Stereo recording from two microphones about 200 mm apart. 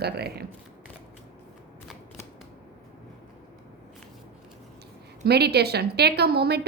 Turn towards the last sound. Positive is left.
turn(degrees=-55)  # may be behind; listen again after turning